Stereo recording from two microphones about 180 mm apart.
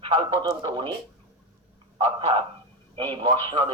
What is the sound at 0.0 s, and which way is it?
Speech, 30° right (ahead or behind).